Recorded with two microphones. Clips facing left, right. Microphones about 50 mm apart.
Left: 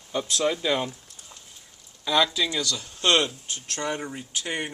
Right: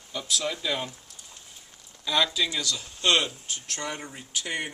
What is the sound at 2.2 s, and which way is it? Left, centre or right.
Speech, centre.